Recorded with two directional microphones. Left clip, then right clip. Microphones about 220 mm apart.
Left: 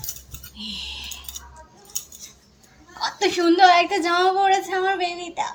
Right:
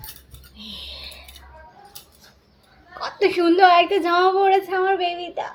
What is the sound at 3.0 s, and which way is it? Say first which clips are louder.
A woman's voice: right 2 dB; 15° right (ahead or behind).